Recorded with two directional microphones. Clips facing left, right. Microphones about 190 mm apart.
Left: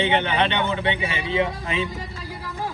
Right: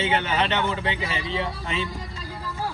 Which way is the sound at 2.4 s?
15° left (ahead or behind).